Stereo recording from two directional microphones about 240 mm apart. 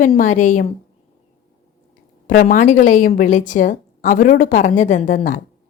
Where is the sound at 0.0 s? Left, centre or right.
Left.